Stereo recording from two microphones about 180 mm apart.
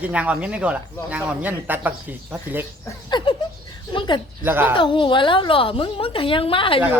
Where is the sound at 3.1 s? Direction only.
25° left (ahead or behind).